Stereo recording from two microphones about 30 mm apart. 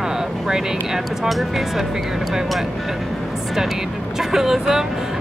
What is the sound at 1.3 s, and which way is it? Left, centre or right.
Speech, centre.